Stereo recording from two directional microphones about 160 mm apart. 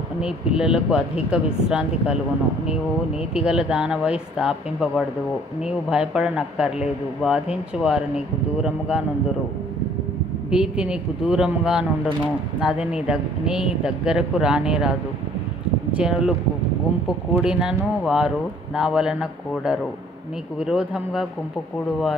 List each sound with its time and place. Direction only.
0.2 s speech: 5° right (ahead or behind)
3.3 s speech: 5° right (ahead or behind)
10.5 s speech: 5° right (ahead or behind)
17.4 s speech: 5° right (ahead or behind)